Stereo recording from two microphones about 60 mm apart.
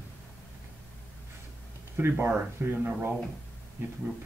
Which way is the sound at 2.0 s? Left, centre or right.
Right.